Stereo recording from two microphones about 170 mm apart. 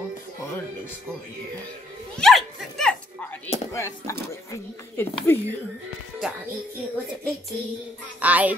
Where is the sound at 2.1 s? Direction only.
Centre (ahead or behind).